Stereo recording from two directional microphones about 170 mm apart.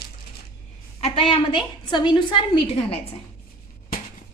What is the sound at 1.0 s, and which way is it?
A woman's voice, 35° left (ahead or behind).